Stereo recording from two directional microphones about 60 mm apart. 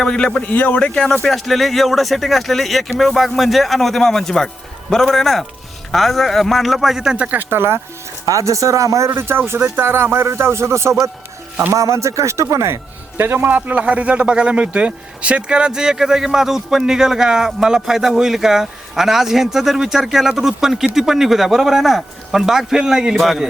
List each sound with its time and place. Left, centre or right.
0.0 s a man's voice: centre
0.5 s speech: left; by 7.3 s centre
7.3 s speech: right
8.3 s speech: right
9.0 s speech: right
13.5 s a man's voice: right; by 23.2 s centre